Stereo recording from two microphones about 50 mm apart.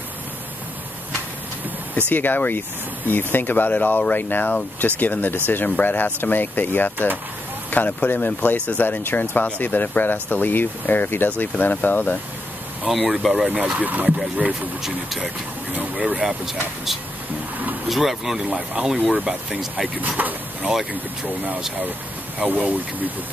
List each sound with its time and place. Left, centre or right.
2.0 s speech: left
8.5 s speech: left
8.8 s speech: left
11.2 s speech: left
12.8 s speech: centre
13.7 s speech: right
14.0 s speech: centre
17.8 s speech: centre
20.2 s speech: right
22.4 s speech: right